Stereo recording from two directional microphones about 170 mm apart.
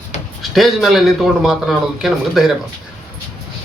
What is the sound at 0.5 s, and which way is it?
Speech, centre (ahead or behind).